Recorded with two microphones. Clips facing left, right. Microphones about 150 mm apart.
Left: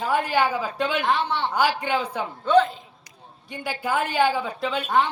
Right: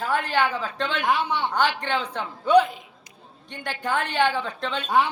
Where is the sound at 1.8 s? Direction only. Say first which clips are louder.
Left 2 dB; 10° left (ahead or behind).